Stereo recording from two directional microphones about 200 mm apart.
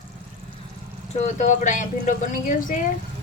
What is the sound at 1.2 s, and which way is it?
Speech, 35° left (ahead or behind).